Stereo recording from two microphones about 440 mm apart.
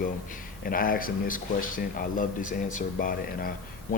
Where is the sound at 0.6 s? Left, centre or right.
Centre.